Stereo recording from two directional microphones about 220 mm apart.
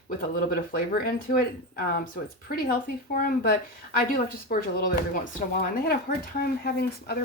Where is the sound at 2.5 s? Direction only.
40° left (ahead or behind).